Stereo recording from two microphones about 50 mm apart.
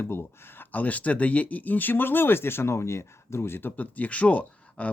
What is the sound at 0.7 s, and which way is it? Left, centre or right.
Speech, left.